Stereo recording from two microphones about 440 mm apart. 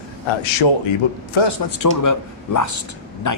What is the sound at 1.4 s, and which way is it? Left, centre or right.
Speech, left.